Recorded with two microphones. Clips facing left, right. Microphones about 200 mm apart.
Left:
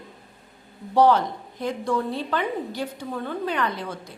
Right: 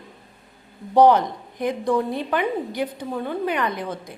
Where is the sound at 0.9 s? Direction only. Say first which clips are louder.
Right 3 dB; 15° right (ahead or behind).